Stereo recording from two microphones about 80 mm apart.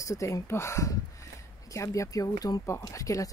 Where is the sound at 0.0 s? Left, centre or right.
Left.